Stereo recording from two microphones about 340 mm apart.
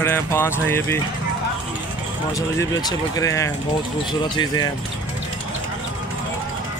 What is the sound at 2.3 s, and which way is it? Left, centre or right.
Speech, centre.